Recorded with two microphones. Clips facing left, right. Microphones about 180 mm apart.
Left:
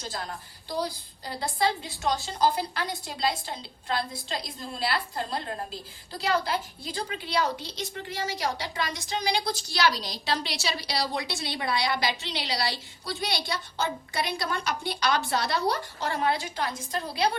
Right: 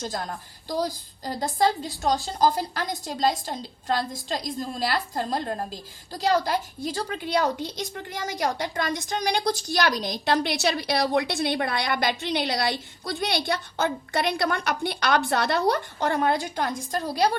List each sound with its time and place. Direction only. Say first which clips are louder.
0.7 s a woman's voice: right 4 dB; 40° right (ahead or behind)